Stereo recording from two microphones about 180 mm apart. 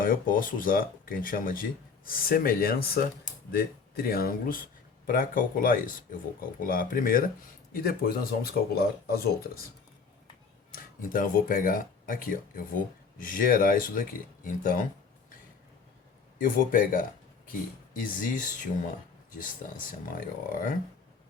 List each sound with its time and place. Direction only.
0.0 s speech: 50° left (ahead or behind)
10.7 s speech: 50° left (ahead or behind)
16.4 s speech: 50° left (ahead or behind)
19.6 s speech: 50° left (ahead or behind)